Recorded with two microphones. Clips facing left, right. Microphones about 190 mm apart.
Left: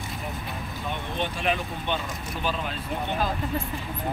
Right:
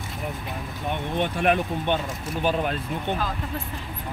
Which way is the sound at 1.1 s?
55° right (ahead or behind).